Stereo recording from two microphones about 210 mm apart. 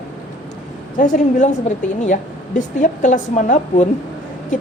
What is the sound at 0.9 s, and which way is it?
Speech, 35° left (ahead or behind).